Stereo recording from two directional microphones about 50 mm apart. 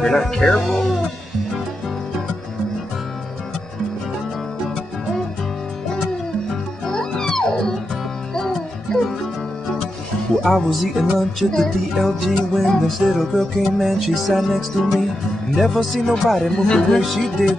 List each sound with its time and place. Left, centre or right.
0.0 s speech: centre
6.9 s music: centre
10.4 s music: centre
16.6 s speech: centre
17.0 s music: centre